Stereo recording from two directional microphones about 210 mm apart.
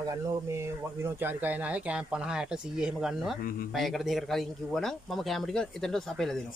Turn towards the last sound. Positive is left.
turn(degrees=0)  # may be behind; listen again after turning